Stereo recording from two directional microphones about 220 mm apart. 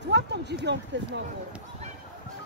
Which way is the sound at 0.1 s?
50° right (ahead or behind).